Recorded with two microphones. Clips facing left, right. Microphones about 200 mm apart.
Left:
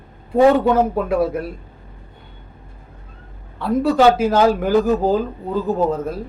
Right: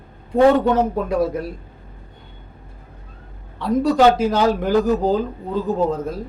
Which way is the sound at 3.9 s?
5° left (ahead or behind).